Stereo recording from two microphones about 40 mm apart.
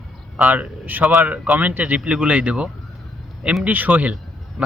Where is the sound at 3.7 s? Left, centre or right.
Right.